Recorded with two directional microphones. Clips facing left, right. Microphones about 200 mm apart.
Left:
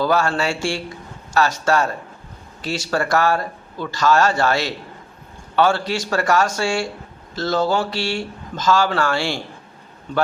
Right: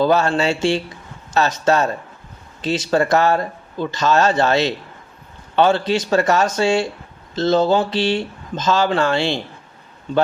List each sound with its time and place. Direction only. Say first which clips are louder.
0.0 s speech: right 3 dB; 20° right (ahead or behind)